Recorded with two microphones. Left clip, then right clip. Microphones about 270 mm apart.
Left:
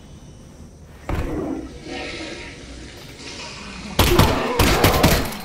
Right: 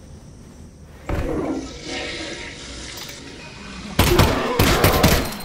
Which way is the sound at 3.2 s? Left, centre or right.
Centre.